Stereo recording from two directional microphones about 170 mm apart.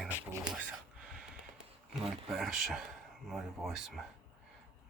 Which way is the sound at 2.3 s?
Centre (ahead or behind).